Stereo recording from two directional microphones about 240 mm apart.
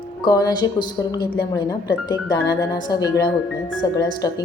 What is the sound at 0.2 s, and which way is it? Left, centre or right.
Speech, centre.